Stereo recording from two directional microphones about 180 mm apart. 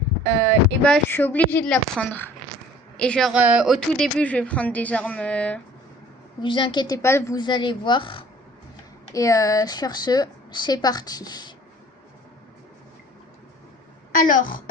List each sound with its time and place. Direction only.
0.9 s a woman's voice: 10° left (ahead or behind)
6.4 s a woman's voice: 30° left (ahead or behind)
14.1 s speech: 50° left (ahead or behind)